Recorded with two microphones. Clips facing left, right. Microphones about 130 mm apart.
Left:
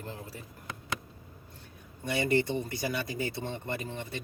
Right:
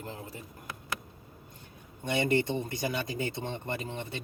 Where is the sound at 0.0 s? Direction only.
20° right (ahead or behind).